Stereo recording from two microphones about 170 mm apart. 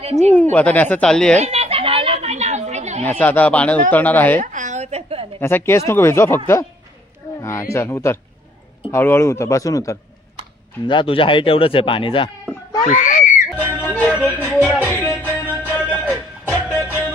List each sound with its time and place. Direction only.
0.0 s speech: 40° right (ahead or behind)
0.3 s speech: 10° left (ahead or behind)
1.3 s a sound: 40° right (ahead or behind)
3.1 s speech: 10° left (ahead or behind)
4.4 s a sound: 45° right (ahead or behind)
5.4 s speech: 15° left (ahead or behind)
10.9 s speech: 30° left (ahead or behind)
12.8 s a child's voice: 50° left (ahead or behind)
13.7 s music: 10° left (ahead or behind)